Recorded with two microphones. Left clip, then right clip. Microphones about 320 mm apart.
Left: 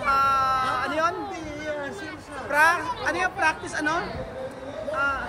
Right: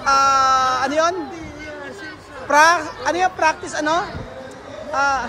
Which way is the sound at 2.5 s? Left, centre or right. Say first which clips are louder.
Right 7 dB; centre.